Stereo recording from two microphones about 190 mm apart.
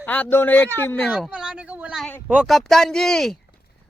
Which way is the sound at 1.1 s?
5° right (ahead or behind).